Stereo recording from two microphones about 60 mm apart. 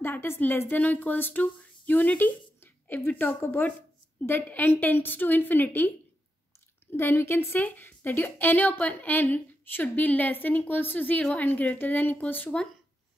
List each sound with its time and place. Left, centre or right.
0.0 s a woman's voice: left